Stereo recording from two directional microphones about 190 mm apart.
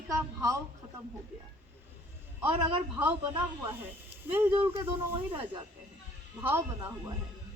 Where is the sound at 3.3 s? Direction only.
15° right (ahead or behind).